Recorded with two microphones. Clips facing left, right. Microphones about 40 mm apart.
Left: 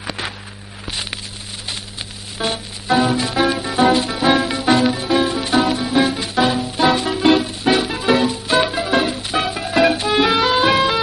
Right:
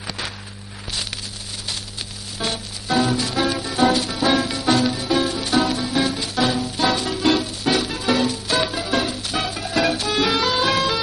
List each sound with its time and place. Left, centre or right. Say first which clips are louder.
2.3 s music: left 4 dB; left
6.5 s music: left 4 dB; centre